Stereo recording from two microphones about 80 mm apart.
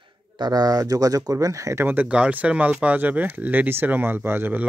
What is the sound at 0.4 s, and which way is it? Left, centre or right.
Speech, right.